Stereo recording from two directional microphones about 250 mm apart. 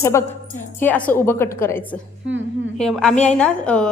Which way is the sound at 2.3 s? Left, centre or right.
Right.